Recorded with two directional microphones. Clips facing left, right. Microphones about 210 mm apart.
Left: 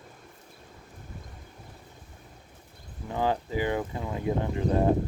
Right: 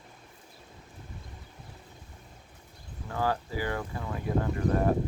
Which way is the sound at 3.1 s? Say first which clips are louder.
Left 3 dB; 20° left (ahead or behind).